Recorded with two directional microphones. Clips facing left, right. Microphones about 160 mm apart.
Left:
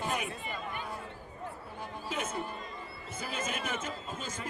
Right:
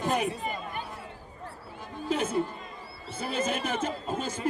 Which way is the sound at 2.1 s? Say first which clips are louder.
Right 9 dB; 30° right (ahead or behind).